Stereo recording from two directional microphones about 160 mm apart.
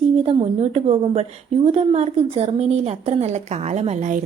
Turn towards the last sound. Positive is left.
turn(degrees=-45)  # may be behind; listen again after turning